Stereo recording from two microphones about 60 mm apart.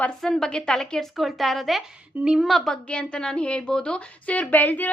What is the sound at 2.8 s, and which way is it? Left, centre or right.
A woman's voice, centre.